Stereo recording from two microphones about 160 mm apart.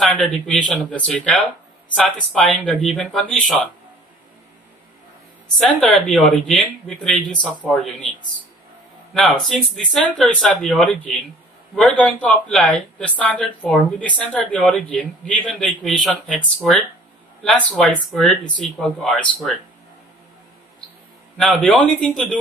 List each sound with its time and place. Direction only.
0.0 s speech: centre (ahead or behind)
5.8 s speech: centre (ahead or behind)
9.1 s speech: centre (ahead or behind)
21.4 s speech: centre (ahead or behind)